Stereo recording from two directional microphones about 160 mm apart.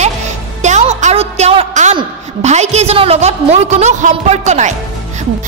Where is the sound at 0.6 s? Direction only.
45° right (ahead or behind).